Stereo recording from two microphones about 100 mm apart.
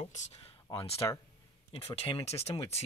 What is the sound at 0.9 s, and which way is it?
Speech, 35° left (ahead or behind).